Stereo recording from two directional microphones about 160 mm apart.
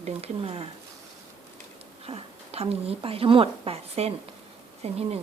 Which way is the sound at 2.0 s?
40° right (ahead or behind).